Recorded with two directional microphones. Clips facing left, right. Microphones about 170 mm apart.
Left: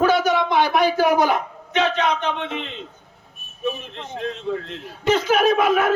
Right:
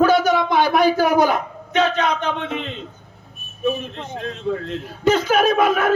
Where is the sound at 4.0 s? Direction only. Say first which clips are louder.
Even; 40° right (ahead or behind).